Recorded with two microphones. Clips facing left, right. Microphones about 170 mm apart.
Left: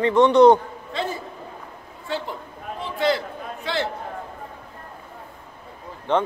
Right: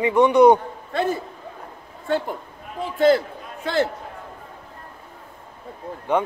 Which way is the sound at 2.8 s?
45° right (ahead or behind).